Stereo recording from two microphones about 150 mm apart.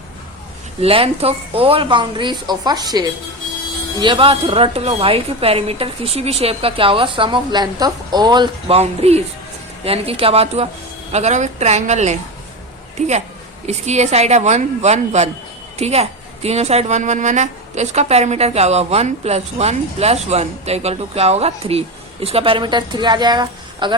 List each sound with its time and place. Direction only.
0.8 s a woman's voice: 40° right (ahead or behind)
4.0 s a woman's voice: 35° right (ahead or behind)